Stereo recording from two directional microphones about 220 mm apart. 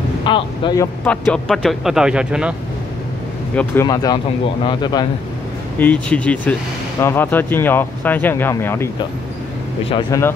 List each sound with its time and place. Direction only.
0.2 s speech: 20° left (ahead or behind)
1.0 s speech: 5° left (ahead or behind)
3.5 s speech: 10° left (ahead or behind)
5.8 s speech: 5° left (ahead or behind)
9.8 s speech: 20° left (ahead or behind)